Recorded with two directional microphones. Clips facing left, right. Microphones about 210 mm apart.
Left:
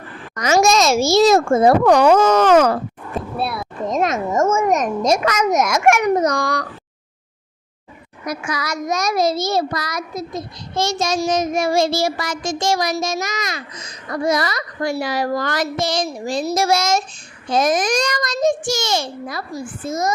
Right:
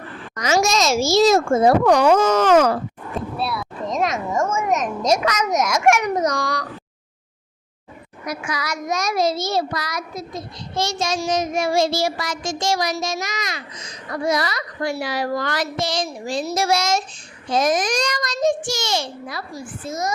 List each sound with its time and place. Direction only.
0.3 s a child's voice: 55° left (ahead or behind)
8.3 s a child's voice: 45° left (ahead or behind)